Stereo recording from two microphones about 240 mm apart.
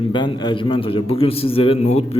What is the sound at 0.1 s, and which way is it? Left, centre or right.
A man's voice, centre.